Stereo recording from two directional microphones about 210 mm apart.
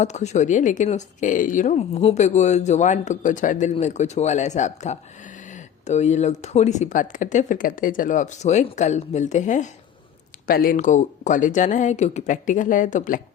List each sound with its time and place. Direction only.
0.0 s speech: 35° left (ahead or behind)